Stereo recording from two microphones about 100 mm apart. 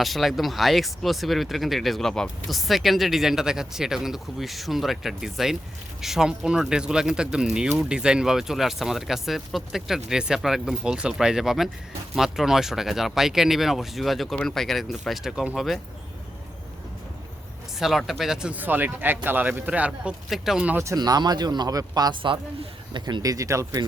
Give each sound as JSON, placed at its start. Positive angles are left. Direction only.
{"t": 0.0, "sound": "a man's voice", "side_deg": 0}
{"t": 17.7, "sound": "a man's voice", "side_deg": -5}
{"t": 18.5, "sound": "speech", "side_deg": -20}
{"t": 20.3, "sound": "a man's voice", "side_deg": -5}
{"t": 20.7, "sound": "speech", "side_deg": -30}
{"t": 21.0, "sound": "speech", "side_deg": -40}
{"t": 22.9, "sound": "speech", "side_deg": -50}
{"t": 23.2, "sound": "speech", "side_deg": -35}